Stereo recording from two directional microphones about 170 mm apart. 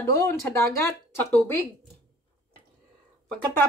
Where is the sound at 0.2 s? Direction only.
15° left (ahead or behind).